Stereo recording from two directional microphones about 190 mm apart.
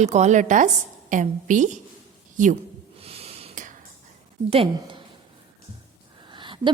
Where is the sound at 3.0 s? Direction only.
30° right (ahead or behind).